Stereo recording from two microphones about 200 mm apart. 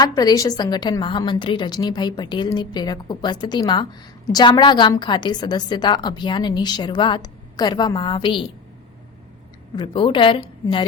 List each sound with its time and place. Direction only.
0.0 s a woman's voice: 20° left (ahead or behind)
9.7 s a woman's voice: 25° left (ahead or behind)